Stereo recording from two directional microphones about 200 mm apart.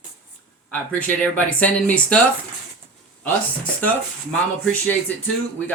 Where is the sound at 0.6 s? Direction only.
5° left (ahead or behind).